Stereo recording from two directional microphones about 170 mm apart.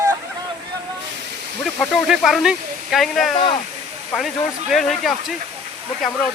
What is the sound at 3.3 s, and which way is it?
Speech, 30° left (ahead or behind).